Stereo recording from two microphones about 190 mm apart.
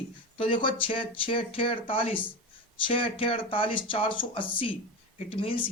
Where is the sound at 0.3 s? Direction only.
25° left (ahead or behind).